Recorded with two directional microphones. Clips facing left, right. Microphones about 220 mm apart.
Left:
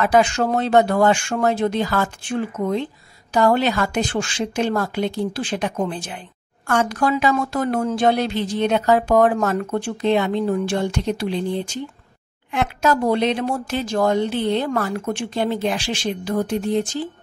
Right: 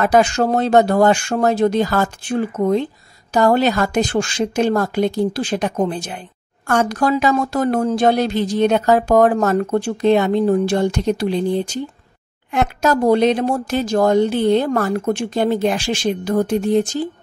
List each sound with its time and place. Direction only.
0.0 s a woman's voice: 40° right (ahead or behind)